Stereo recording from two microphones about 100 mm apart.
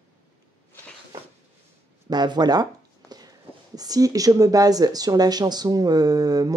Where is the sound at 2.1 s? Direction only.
45° right (ahead or behind).